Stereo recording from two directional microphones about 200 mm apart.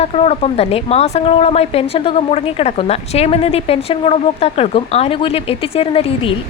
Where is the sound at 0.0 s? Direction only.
30° left (ahead or behind).